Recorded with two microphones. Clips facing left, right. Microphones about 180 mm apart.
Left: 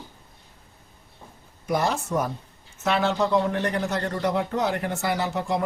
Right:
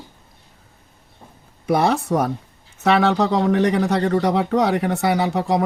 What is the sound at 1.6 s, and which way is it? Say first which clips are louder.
Speech: right 6 dB; 65° right (ahead or behind).